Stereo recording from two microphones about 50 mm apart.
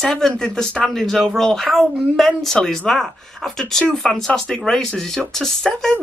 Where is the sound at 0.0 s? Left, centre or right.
Centre.